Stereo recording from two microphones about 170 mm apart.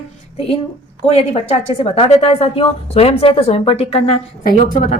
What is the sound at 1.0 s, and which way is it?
A woman's voice, 35° left (ahead or behind).